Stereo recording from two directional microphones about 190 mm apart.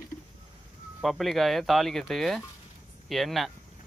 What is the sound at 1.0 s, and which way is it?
Speech, centre (ahead or behind).